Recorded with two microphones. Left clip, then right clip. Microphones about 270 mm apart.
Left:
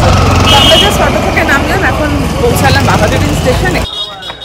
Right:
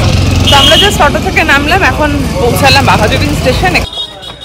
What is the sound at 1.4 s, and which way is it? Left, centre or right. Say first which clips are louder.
Speech: right 2 dB; centre.